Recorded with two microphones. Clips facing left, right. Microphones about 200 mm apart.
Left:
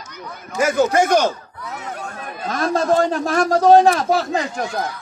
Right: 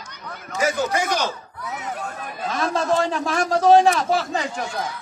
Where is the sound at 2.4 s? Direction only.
40° left (ahead or behind).